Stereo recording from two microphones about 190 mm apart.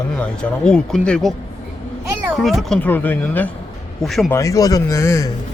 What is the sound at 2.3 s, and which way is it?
Speech, centre (ahead or behind).